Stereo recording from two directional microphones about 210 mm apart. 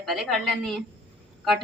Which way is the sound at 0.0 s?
Centre (ahead or behind).